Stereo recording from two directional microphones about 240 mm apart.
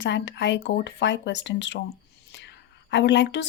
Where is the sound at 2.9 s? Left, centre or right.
Left.